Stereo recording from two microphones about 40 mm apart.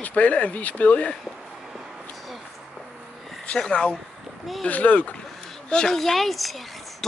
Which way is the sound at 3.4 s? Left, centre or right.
Left.